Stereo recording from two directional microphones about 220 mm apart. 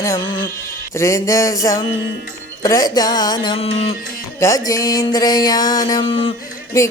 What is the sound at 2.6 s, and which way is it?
Speech, 15° left (ahead or behind).